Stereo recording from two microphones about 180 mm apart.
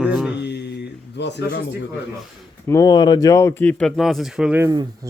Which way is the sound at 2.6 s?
20° left (ahead or behind).